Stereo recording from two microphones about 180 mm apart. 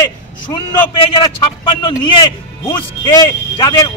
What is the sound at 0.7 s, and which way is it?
A man's voice, 25° left (ahead or behind).